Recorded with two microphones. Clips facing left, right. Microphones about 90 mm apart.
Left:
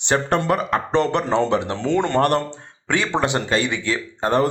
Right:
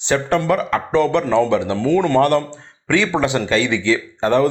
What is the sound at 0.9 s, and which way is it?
Speech, 55° left (ahead or behind).